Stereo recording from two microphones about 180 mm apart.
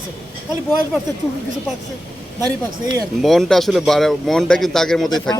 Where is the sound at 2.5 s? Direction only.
20° right (ahead or behind).